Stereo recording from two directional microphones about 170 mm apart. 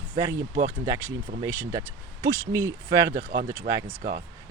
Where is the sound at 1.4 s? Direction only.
15° right (ahead or behind).